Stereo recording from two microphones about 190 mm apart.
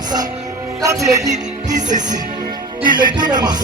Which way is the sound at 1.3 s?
40° right (ahead or behind).